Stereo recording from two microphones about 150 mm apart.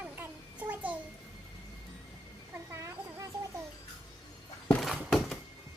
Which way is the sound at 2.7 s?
20° right (ahead or behind).